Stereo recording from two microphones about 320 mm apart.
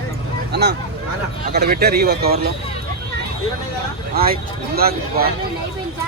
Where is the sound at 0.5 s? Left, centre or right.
Right.